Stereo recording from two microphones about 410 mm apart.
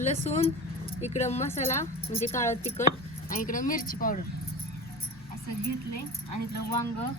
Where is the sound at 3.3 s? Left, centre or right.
Centre.